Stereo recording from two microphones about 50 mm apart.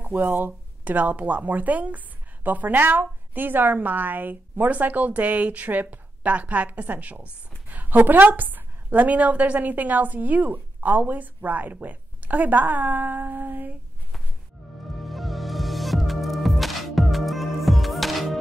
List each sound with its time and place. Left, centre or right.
0.0 s a sound: right
0.5 s speech: right
15.0 s music: centre